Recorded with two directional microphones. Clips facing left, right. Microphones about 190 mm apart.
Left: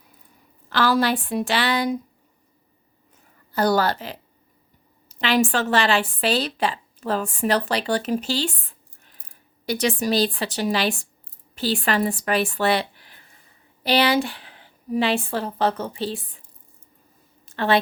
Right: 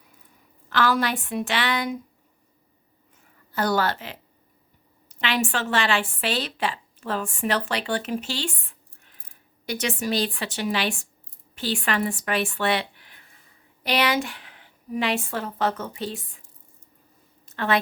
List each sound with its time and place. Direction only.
0.7 s a woman's voice: 35° left (ahead or behind)
3.5 s a woman's voice: 35° left (ahead or behind)
9.6 s a woman's voice: 35° left (ahead or behind)
17.4 s a sound: 30° left (ahead or behind)